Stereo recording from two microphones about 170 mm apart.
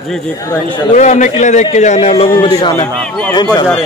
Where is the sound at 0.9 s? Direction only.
45° left (ahead or behind).